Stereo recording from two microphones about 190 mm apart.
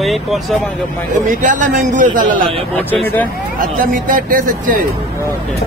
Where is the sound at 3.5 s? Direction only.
45° right (ahead or behind).